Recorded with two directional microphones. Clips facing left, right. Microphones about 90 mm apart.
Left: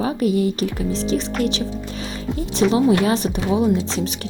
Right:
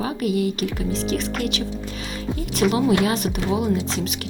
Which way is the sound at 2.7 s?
30° left (ahead or behind).